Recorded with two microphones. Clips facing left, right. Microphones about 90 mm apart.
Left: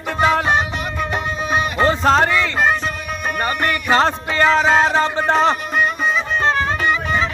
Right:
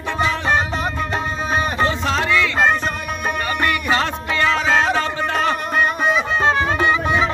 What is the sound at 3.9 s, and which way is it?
Music, 35° left (ahead or behind).